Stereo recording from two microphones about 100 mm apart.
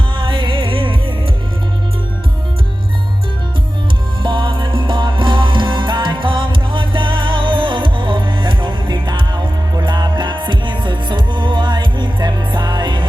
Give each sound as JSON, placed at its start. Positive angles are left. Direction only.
{"t": 0.2, "sound": "music", "side_deg": -60}
{"t": 4.2, "sound": "music", "side_deg": -55}